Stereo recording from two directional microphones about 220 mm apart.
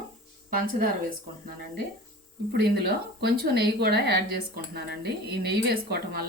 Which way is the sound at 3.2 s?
45° right (ahead or behind).